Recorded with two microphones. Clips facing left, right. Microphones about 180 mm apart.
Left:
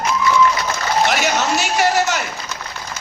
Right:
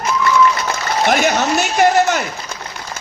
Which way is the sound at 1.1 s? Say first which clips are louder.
Right 3 dB; 50° right (ahead or behind).